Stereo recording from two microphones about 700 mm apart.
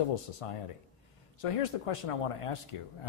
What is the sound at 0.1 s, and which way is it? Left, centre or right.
Speech, left.